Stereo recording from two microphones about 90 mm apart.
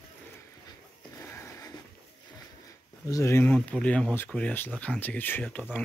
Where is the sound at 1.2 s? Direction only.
30° left (ahead or behind).